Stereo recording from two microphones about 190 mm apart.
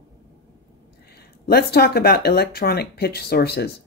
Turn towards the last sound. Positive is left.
turn(degrees=55)  # may be behind; listen again after turning